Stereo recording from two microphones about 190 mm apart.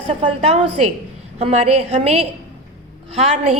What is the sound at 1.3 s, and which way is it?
A woman's voice, 35° right (ahead or behind).